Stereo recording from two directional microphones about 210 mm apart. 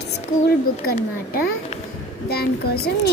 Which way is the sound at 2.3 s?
50° left (ahead or behind).